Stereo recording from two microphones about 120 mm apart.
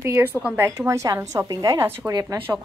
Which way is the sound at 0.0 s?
20° right (ahead or behind).